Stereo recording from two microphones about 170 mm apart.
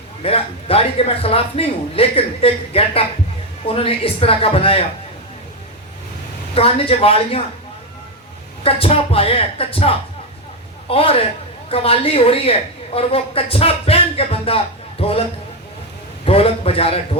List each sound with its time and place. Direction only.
0.2 s a woman's voice: 35° left (ahead or behind)
6.5 s a woman's voice: 35° left (ahead or behind)
8.6 s a woman's voice: 35° left (ahead or behind)
16.2 s a woman's voice: 35° left (ahead or behind)